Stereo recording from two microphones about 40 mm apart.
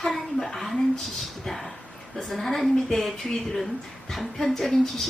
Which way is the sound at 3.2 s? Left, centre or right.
Left.